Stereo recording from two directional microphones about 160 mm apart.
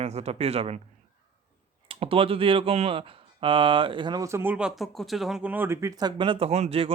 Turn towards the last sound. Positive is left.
turn(degrees=-35)  # may be behind; listen again after turning